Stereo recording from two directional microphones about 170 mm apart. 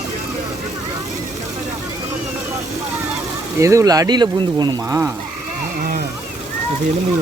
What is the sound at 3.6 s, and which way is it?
Speech, 20° right (ahead or behind).